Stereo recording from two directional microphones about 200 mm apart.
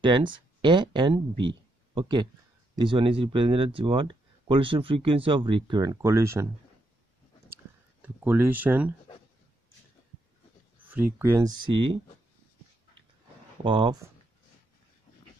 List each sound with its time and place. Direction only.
0.0 s speech: 25° right (ahead or behind)
7.4 s a sound: 10° right (ahead or behind)
10.9 s speech: 10° right (ahead or behind)
13.7 s speech: 25° right (ahead or behind)